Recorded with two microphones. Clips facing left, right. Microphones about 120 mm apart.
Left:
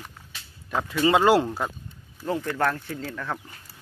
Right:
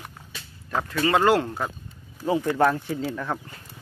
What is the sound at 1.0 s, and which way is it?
Speech, 20° left (ahead or behind).